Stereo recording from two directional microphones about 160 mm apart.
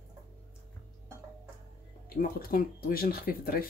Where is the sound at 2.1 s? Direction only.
65° left (ahead or behind).